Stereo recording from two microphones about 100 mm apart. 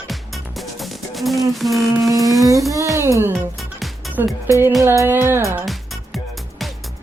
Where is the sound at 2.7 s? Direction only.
30° right (ahead or behind).